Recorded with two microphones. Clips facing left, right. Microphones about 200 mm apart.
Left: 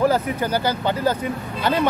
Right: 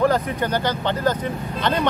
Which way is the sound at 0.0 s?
5° left (ahead or behind).